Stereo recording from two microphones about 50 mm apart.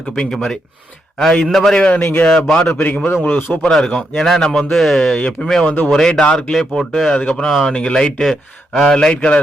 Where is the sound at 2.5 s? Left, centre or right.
Left.